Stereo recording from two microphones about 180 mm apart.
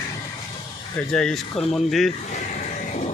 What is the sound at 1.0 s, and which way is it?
Speech, 5° left (ahead or behind).